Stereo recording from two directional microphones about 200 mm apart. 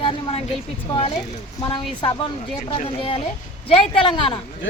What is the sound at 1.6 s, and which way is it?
Speech, 25° left (ahead or behind).